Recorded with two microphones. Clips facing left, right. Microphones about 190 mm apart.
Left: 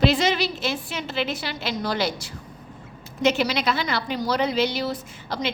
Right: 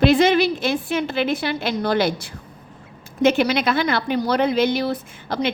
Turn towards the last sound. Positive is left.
turn(degrees=-55)  # may be behind; listen again after turning